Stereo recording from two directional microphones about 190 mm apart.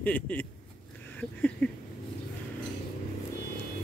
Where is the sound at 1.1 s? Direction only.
10° left (ahead or behind).